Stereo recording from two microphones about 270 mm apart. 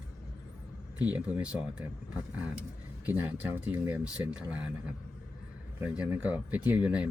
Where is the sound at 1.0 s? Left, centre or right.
Centre.